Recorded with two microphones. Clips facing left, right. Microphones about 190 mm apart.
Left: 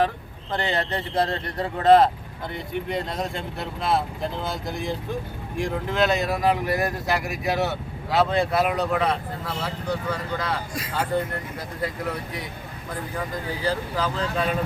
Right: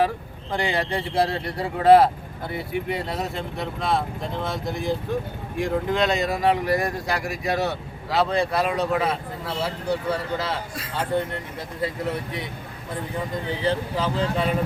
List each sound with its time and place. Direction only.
0.5 s speech: 10° right (ahead or behind)
9.9 s speech: 30° right (ahead or behind)
11.8 s speech: 25° right (ahead or behind)